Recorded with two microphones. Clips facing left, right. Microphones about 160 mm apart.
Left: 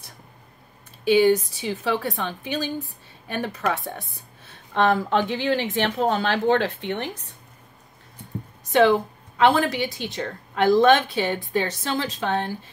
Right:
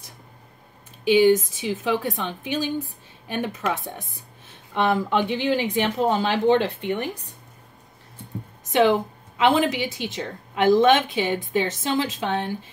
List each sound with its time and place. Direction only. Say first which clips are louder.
1.0 s a woman's voice: right 1 dB; 15° right (ahead or behind)
9.4 s a woman's voice: even; 15° right (ahead or behind)